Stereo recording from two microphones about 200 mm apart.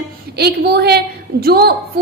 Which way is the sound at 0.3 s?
55° right (ahead or behind).